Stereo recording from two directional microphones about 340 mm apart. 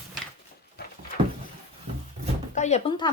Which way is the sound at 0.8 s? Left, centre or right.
Left.